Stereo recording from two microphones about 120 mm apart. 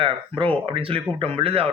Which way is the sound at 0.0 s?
45° right (ahead or behind).